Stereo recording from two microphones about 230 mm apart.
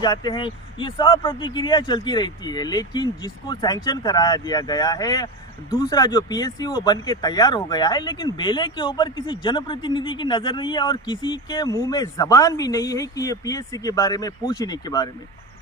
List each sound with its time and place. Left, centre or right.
0.0 s speech: centre